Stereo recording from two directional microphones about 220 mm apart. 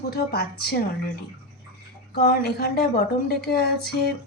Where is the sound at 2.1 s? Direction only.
45° left (ahead or behind).